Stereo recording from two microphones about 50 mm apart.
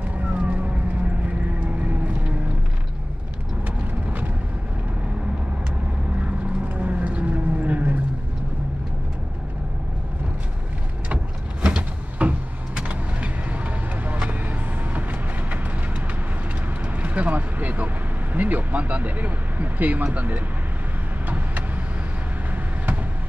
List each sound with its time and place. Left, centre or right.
0.0 s a sound: right
1.2 s vehicle: right
3.6 s vehicle: right
6.8 s vehicle: right
11.6 s a sound: centre
12.7 s vehicle: right
16.8 s vehicle: right